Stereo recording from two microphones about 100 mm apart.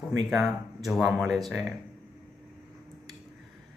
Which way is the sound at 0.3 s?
Centre (ahead or behind).